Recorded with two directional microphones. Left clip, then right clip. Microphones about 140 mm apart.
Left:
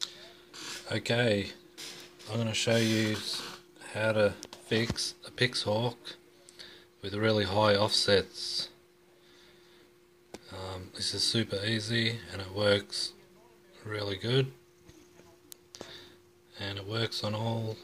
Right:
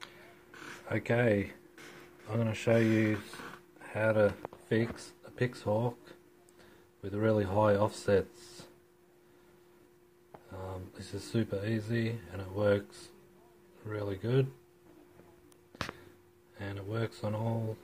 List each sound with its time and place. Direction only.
0.8 s speech: centre (ahead or behind)
10.5 s speech: centre (ahead or behind)
16.5 s speech: centre (ahead or behind)